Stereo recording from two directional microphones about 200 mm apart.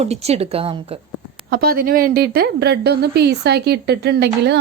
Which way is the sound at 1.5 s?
50° right (ahead or behind).